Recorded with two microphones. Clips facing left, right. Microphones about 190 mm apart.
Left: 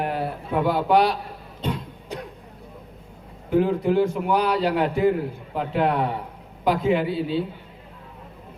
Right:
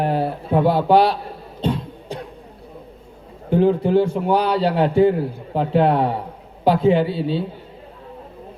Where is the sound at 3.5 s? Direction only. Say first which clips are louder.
Right 4 dB; 30° right (ahead or behind).